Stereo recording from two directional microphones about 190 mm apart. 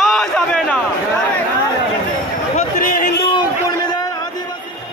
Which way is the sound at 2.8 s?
50° left (ahead or behind).